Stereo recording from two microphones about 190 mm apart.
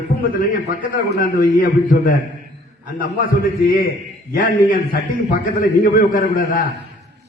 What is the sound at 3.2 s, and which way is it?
A man's voice, 50° left (ahead or behind).